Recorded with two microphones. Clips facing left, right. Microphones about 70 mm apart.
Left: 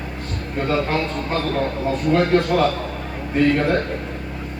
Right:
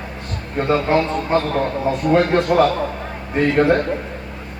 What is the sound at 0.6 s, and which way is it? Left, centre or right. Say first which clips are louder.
A man's voice: right 4 dB; centre.